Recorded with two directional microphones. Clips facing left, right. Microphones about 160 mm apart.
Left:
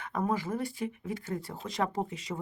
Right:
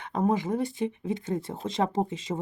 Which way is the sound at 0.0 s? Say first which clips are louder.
Right 5 dB; 20° right (ahead or behind).